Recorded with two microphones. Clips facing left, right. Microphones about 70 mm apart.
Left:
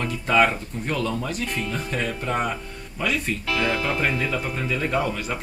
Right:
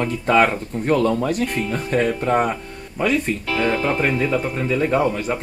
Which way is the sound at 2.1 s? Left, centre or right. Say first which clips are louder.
Right 6 dB; right.